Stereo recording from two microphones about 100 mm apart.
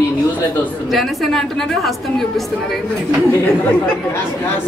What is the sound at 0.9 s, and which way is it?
A woman's voice, centre (ahead or behind).